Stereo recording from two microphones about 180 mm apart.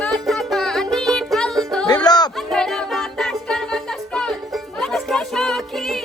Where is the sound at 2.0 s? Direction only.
20° left (ahead or behind).